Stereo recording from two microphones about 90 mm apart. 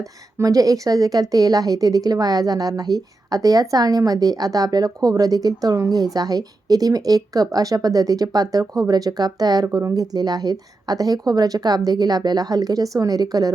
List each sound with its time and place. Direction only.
0.0 s speech: 40° right (ahead or behind)